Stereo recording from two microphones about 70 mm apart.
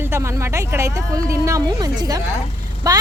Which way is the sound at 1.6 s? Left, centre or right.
Right.